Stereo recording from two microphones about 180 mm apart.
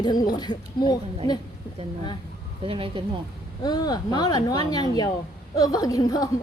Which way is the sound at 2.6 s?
30° right (ahead or behind).